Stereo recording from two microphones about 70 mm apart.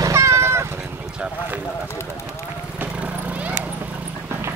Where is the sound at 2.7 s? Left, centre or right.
Right.